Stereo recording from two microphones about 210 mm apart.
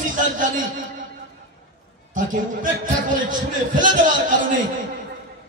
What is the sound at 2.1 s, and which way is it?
A man's voice, 40° right (ahead or behind).